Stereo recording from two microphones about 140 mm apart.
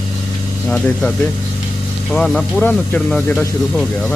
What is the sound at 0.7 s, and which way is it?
Speech, 5° left (ahead or behind).